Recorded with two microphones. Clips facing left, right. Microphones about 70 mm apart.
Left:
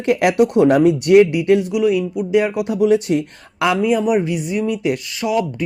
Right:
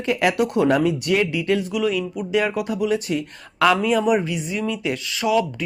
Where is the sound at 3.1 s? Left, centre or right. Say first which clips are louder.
Left 6 dB; left.